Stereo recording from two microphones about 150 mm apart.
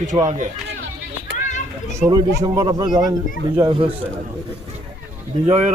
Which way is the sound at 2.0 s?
25° right (ahead or behind).